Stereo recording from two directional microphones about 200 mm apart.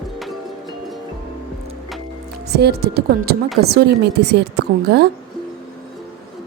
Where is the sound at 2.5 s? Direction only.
55° right (ahead or behind).